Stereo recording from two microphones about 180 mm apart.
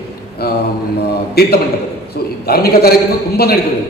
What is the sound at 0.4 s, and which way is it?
A man's voice, 60° left (ahead or behind).